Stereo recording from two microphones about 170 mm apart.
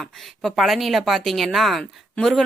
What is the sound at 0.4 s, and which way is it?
A woman's voice, centre (ahead or behind).